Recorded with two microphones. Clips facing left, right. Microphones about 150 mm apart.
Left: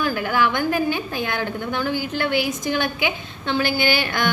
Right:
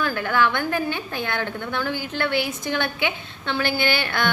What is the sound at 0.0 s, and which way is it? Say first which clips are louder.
A woman's voice: left 1 dB; 10° left (ahead or behind).